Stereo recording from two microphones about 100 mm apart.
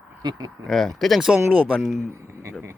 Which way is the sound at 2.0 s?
30° right (ahead or behind).